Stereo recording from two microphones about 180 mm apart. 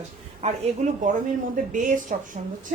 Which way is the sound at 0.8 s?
40° right (ahead or behind).